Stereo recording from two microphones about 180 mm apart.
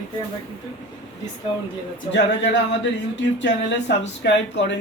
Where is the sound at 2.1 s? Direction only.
75° left (ahead or behind).